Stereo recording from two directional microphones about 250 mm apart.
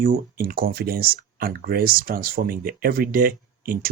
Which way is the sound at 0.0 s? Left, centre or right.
Right.